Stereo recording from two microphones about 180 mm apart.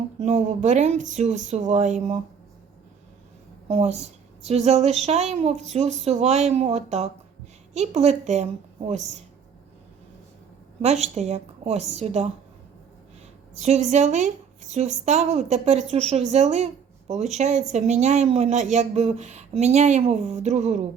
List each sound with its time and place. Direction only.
0.2 s a woman's voice: 40° right (ahead or behind)
3.7 s a woman's voice: 35° right (ahead or behind)
10.8 s a woman's voice: 40° right (ahead or behind)
13.5 s a woman's voice: 40° right (ahead or behind)